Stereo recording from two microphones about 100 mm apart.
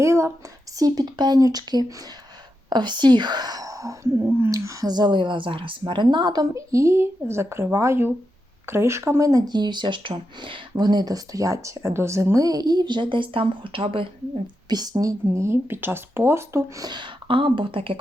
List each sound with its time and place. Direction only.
0.0 s a sound: 30° right (ahead or behind)
0.8 s speech: 40° right (ahead or behind)
2.6 s speech: 50° right (ahead or behind)
6.4 s speech: 35° right (ahead or behind)
16.8 s speech: 50° right (ahead or behind)